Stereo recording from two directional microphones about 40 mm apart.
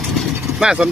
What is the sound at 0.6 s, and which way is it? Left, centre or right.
Speech, centre.